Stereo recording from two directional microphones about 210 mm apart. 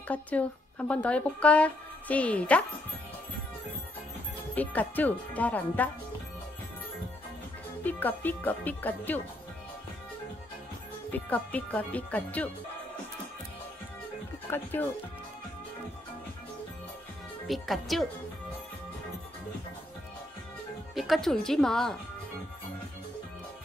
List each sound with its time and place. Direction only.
0.1 s speech: 5° left (ahead or behind)
4.6 s speech: 10° left (ahead or behind)
7.8 s speech: 10° left (ahead or behind)
11.1 s speech: 10° left (ahead or behind)
14.5 s speech: 10° left (ahead or behind)
17.5 s speech: centre (ahead or behind)
20.9 s speech: centre (ahead or behind)